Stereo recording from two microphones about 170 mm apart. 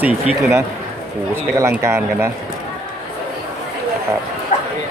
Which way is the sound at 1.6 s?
15° right (ahead or behind).